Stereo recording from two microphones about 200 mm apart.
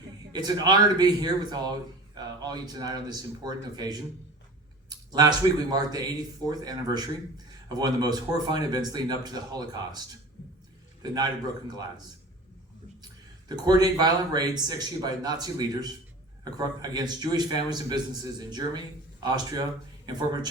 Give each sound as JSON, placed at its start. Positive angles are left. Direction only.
{"t": 0.3, "sound": "a man's voice", "side_deg": -20}
{"t": 11.0, "sound": "speech", "side_deg": -20}
{"t": 13.7, "sound": "a man's voice", "side_deg": -20}